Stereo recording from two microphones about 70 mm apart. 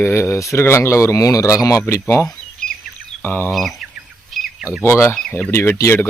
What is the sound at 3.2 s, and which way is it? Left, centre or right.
Speech, left.